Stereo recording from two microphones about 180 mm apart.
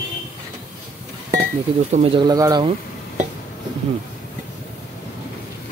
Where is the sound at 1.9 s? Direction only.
30° right (ahead or behind).